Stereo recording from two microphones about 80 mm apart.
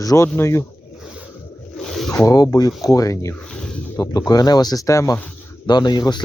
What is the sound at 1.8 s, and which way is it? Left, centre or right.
Zipper, centre.